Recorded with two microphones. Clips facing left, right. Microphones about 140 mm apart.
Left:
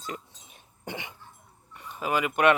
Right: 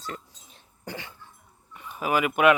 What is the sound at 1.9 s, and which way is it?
Speech, 10° right (ahead or behind).